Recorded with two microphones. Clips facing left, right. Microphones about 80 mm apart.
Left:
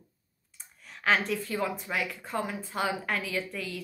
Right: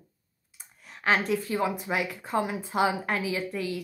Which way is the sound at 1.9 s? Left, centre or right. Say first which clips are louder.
Right 3 dB; right.